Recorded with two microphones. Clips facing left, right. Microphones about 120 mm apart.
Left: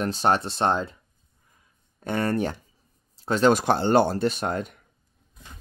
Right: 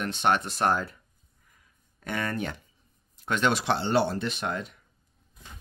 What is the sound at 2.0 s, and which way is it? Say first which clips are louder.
Speech: left 6 dB; 35° left (ahead or behind).